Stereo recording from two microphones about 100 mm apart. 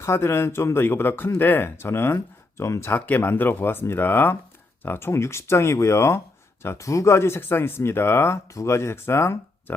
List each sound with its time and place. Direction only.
0.0 s speech: 25° left (ahead or behind)